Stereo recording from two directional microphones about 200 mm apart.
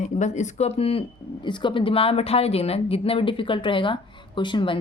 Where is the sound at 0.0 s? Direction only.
35° left (ahead or behind).